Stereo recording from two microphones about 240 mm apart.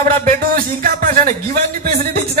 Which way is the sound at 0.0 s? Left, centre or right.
Right.